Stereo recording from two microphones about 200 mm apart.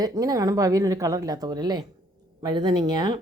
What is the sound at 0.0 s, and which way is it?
A woman's voice, 20° right (ahead or behind).